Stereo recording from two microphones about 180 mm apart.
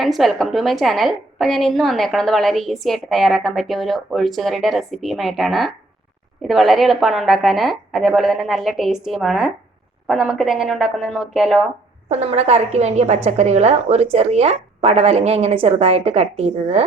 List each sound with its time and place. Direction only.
0.0 s a woman's voice: centre (ahead or behind)
12.0 s a woman's voice: 35° right (ahead or behind)